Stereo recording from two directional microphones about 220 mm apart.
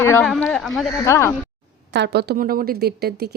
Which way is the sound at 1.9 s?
50° right (ahead or behind).